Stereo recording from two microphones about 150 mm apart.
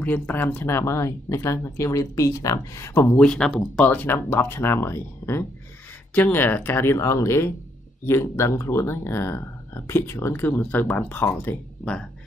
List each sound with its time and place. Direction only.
0.0 s speech: 10° left (ahead or behind)